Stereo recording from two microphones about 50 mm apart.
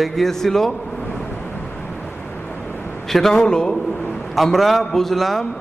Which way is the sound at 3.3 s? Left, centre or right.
Centre.